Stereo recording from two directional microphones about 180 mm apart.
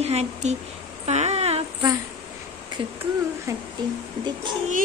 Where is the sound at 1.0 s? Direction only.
40° right (ahead or behind).